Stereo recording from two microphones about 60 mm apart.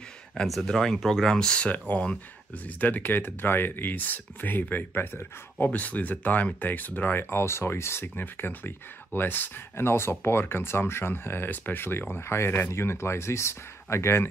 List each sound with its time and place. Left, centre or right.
0.6 s speech: centre
1.9 s speech: left
7.2 s speech: left